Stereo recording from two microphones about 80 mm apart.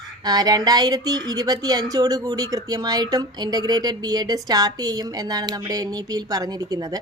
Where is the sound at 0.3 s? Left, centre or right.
Right.